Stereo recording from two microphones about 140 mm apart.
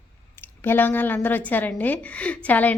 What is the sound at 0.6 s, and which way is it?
A woman's voice, 15° left (ahead or behind).